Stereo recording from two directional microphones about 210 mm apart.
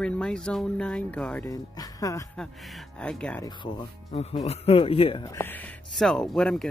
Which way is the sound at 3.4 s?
20° left (ahead or behind).